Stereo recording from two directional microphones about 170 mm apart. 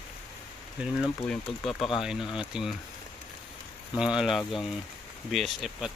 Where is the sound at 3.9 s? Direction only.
5° right (ahead or behind).